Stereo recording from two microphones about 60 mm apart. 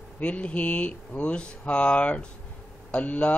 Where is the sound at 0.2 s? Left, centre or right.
Centre.